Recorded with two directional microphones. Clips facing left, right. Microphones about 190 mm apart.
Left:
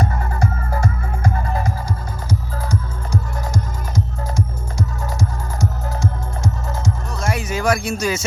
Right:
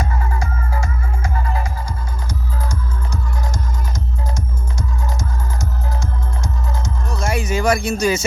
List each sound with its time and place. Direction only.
0.0 s music: 40° left (ahead or behind)
3.5 s music: 5° left (ahead or behind)
7.2 s music: centre (ahead or behind)